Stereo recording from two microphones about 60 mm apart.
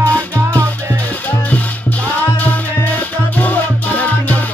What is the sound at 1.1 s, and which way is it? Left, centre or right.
Music, left.